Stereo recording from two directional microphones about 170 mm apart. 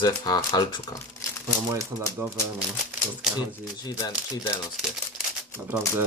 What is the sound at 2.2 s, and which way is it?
Speech, 15° right (ahead or behind).